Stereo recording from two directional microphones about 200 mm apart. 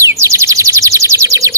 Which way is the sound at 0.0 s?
15° right (ahead or behind).